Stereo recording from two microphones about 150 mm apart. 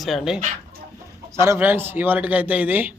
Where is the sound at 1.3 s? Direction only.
20° right (ahead or behind).